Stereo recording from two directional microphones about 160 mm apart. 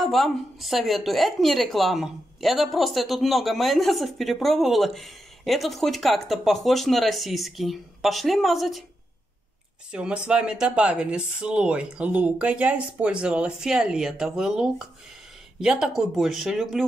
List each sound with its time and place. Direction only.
0.0 s a woman's voice: centre (ahead or behind)
9.8 s a woman's voice: 5° right (ahead or behind)